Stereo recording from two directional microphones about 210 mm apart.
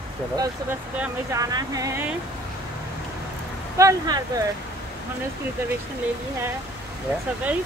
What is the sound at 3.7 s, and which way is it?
Speech, 15° right (ahead or behind).